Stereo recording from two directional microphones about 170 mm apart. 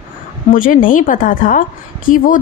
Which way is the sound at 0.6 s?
55° left (ahead or behind).